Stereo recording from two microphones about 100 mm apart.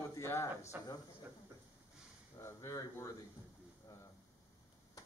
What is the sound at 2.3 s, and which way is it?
Speech, 30° left (ahead or behind).